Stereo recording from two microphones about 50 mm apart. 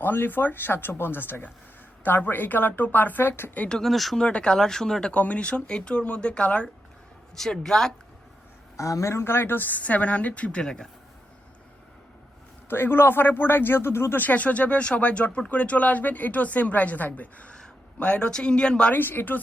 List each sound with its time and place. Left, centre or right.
0.0 s a man's voice: left
3.7 s speech: centre
4.2 s speech: left
4.5 s speech: centre
5.1 s speech: left
7.3 s speech: centre
8.7 s speech: left
10.6 s speech: centre
12.6 s a man's voice: left
14.2 s speech: left
18.9 s speech: left